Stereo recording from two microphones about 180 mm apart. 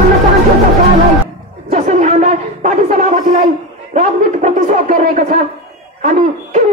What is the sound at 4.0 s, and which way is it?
A man's voice, 40° right (ahead or behind).